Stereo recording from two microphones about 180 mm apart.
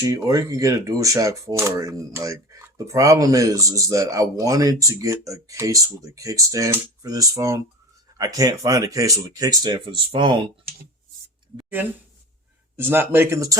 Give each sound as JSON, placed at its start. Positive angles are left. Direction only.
{"t": 0.0, "sound": "speech", "side_deg": -20}
{"t": 11.8, "sound": "speech", "side_deg": -10}